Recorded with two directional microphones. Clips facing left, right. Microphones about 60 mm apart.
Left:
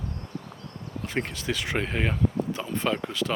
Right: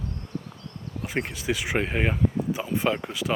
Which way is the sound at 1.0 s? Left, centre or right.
Centre.